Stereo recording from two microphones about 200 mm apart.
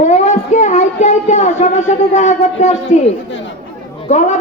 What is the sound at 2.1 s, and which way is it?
Speech, 35° left (ahead or behind).